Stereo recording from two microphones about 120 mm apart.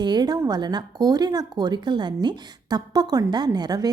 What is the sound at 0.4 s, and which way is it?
A woman's voice, 35° right (ahead or behind).